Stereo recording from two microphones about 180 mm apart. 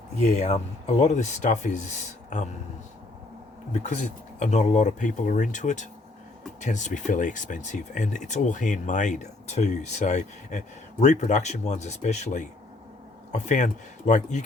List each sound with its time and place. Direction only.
0.3 s speech: 40° left (ahead or behind)
3.7 s speech: 40° left (ahead or behind)